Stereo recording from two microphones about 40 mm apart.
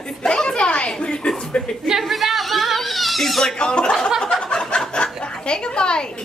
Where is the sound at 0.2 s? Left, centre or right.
Centre.